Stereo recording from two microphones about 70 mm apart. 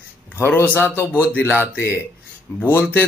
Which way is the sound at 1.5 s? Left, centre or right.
Right.